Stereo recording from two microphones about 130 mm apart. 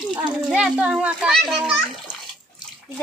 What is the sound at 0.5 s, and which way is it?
A child's voice, 5° right (ahead or behind).